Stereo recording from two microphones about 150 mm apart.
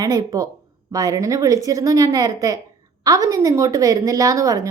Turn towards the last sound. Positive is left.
turn(degrees=-25)  # may be behind; listen again after turning